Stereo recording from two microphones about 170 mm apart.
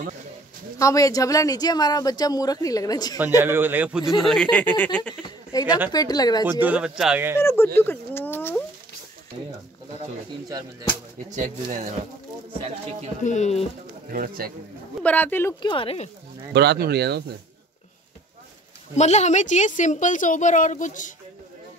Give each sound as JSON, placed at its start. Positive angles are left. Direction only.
{"t": 0.7, "sound": "speech", "side_deg": 20}
{"t": 3.3, "sound": "a man's voice", "side_deg": -15}
{"t": 5.5, "sound": "a woman's voice", "side_deg": 20}
{"t": 6.6, "sound": "a man's voice", "side_deg": -5}
{"t": 7.3, "sound": "speech", "side_deg": 15}
{"t": 11.2, "sound": "speech", "side_deg": -45}
{"t": 13.2, "sound": "speech", "side_deg": 45}
{"t": 14.1, "sound": "a man's voice", "side_deg": -60}
{"t": 15.0, "sound": "speech", "side_deg": 10}
{"t": 15.6, "sound": "speech", "side_deg": 30}
{"t": 16.5, "sound": "speech", "side_deg": -80}
{"t": 18.9, "sound": "a woman's voice", "side_deg": 40}